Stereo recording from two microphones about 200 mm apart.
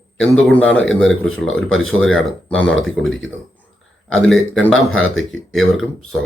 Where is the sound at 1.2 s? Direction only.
90° left.